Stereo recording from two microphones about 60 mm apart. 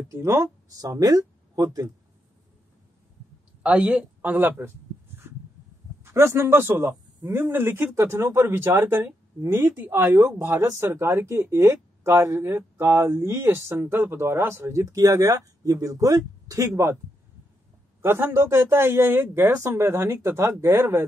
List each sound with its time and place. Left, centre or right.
0.1 s speech: right
0.7 s speech: right
3.6 s speech: right
6.0 s a man's voice: right
18.0 s speech: right